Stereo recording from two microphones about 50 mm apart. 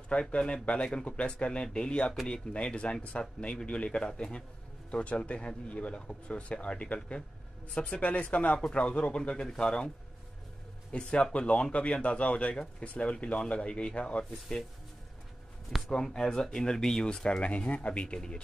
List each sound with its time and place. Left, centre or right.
0.1 s speech: left
10.9 s speech: left
15.9 s speech: centre